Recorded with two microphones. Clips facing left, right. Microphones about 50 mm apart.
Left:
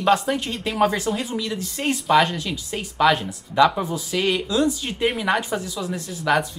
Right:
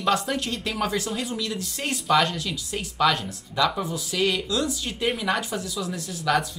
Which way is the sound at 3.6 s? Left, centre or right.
Left.